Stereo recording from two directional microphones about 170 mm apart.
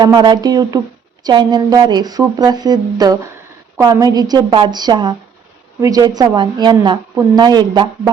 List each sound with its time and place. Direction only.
0.0 s speech: 25° right (ahead or behind)